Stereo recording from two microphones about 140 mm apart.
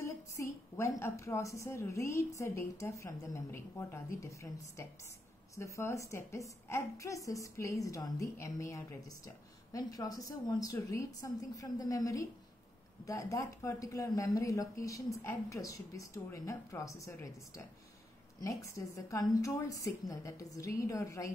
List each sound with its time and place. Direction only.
0.0 s a woman's voice: 20° left (ahead or behind)